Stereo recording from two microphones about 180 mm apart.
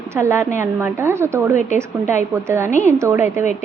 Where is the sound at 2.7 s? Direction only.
40° left (ahead or behind).